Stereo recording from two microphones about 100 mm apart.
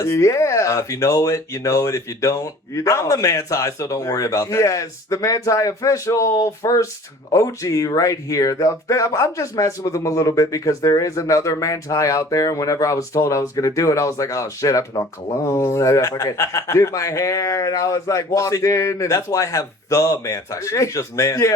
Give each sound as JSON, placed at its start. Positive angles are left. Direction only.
{"t": 0.0, "sound": "speech", "side_deg": 30}